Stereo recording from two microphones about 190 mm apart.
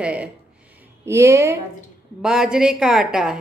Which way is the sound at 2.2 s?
5° right (ahead or behind).